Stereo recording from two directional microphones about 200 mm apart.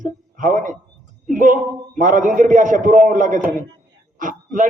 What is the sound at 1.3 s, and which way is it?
A man's voice, 40° right (ahead or behind).